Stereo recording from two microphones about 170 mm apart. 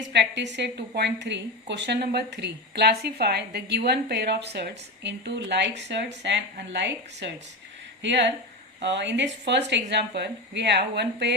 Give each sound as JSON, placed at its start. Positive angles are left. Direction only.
{"t": 0.1, "sound": "a woman's voice", "side_deg": -90}
{"t": 7.2, "sound": "a woman's voice", "side_deg": -90}